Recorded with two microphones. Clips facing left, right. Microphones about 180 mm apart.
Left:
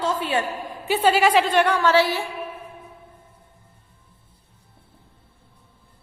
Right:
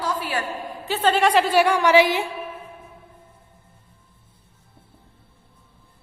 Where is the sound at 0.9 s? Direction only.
10° left (ahead or behind); by 2.2 s 15° right (ahead or behind).